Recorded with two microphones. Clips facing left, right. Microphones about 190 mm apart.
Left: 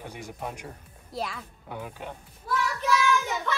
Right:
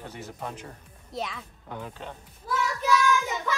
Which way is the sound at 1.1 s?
Centre (ahead or behind).